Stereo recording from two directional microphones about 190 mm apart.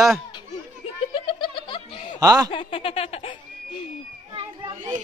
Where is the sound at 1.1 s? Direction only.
25° left (ahead or behind).